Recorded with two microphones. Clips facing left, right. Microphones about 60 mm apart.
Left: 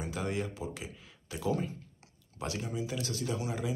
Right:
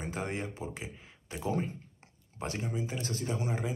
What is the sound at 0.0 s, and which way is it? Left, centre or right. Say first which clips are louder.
Speech: left 1 dB; right.